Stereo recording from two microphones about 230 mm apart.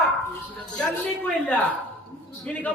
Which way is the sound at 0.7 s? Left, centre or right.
Centre.